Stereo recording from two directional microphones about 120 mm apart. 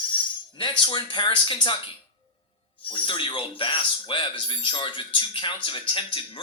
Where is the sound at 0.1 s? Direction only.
45° left (ahead or behind).